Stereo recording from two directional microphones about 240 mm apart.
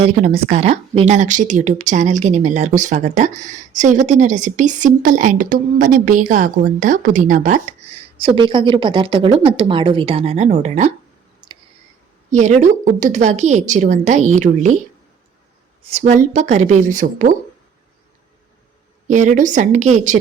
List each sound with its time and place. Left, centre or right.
0.0 s speech: right
12.3 s speech: right
15.8 s speech: right
19.0 s a woman's voice: right